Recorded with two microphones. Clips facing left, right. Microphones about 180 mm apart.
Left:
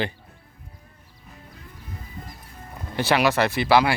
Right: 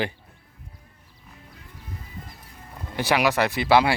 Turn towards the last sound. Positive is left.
turn(degrees=-25)  # may be behind; listen again after turning